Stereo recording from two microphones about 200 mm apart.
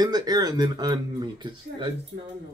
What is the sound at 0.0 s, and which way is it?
Speech, 20° right (ahead or behind).